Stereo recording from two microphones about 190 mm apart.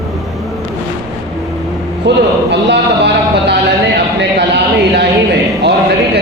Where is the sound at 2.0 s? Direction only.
65° right (ahead or behind).